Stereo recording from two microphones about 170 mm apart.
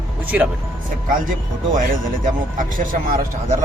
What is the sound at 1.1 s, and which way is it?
Speech, 55° right (ahead or behind).